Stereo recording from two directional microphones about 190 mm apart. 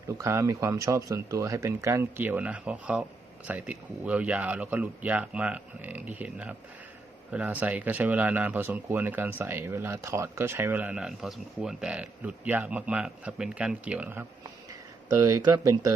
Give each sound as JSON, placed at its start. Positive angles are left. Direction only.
{"t": 0.2, "sound": "speech", "side_deg": -15}
{"t": 15.2, "sound": "speech", "side_deg": -20}